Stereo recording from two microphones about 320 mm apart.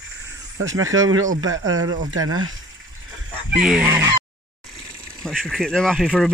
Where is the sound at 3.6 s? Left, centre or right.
Centre.